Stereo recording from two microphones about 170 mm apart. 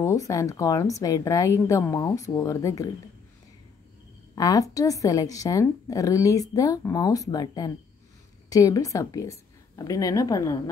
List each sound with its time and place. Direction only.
0.0 s speech: 20° left (ahead or behind)
4.4 s speech: 20° left (ahead or behind)